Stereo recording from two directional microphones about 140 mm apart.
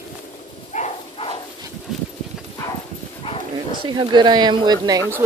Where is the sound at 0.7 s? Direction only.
55° left (ahead or behind).